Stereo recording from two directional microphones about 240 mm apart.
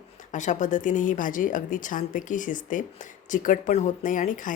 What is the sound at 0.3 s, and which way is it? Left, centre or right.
A woman's voice, left.